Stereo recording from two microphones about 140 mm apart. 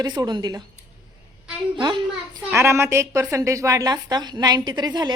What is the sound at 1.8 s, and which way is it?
Speech, 30° right (ahead or behind).